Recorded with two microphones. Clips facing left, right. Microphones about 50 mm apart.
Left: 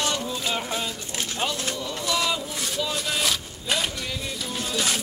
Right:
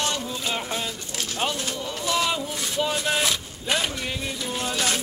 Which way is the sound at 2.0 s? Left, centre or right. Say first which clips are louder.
Right 1 dB; right.